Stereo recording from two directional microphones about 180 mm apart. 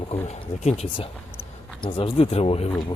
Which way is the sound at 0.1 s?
35° left (ahead or behind).